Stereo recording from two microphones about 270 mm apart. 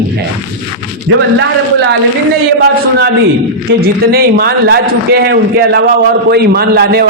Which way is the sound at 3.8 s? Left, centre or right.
Right.